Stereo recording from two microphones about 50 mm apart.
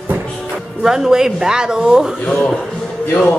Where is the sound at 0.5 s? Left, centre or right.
Centre.